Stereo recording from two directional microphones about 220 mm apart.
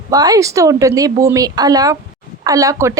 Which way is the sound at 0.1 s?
15° right (ahead or behind).